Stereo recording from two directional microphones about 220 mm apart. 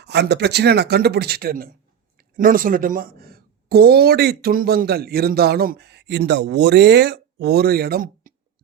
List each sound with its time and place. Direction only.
0.0 s speech: 50° right (ahead or behind)